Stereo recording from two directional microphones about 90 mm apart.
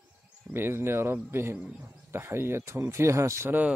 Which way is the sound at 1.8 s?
30° right (ahead or behind).